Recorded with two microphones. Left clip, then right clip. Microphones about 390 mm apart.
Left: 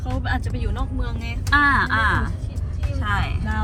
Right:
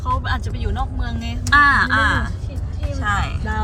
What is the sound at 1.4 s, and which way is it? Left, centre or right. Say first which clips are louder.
Speech: right 4 dB; centre.